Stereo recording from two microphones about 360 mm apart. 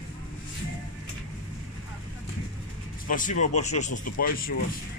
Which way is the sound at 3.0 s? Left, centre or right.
Left.